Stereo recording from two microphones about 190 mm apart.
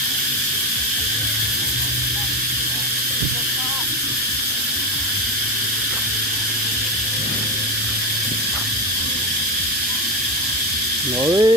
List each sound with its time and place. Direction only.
11.3 s speech: 20° right (ahead or behind)